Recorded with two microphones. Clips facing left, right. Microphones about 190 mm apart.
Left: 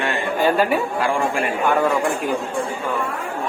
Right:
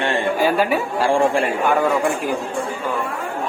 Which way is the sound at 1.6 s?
Centre (ahead or behind).